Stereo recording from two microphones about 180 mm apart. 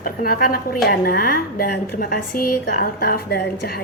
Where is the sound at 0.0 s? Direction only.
55° left (ahead or behind).